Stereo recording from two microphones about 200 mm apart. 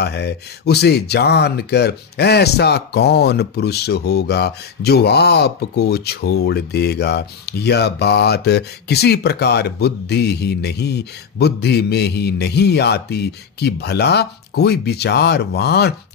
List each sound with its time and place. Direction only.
0.0 s speech: 55° left (ahead or behind)